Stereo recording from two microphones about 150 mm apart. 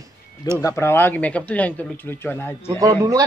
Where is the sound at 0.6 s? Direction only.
15° left (ahead or behind).